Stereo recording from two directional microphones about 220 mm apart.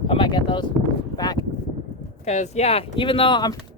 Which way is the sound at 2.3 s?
30° left (ahead or behind).